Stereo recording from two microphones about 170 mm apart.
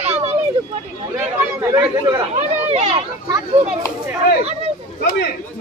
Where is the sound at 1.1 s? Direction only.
15° right (ahead or behind).